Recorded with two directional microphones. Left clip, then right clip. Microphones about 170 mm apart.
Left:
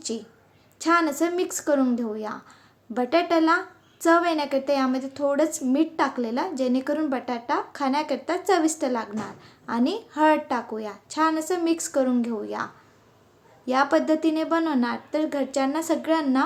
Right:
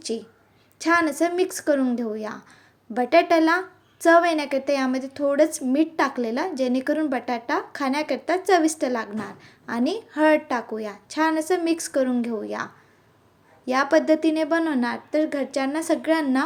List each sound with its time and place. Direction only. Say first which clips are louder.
0.8 s a woman's voice: right 1 dB; 15° right (ahead or behind)